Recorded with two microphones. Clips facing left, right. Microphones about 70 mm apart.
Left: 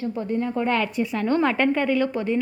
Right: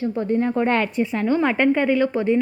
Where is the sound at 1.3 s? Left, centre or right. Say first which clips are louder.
Right 2 dB; centre; by 2.4 s right.